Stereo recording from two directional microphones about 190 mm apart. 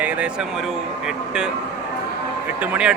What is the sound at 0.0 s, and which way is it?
Speech, 5° right (ahead or behind).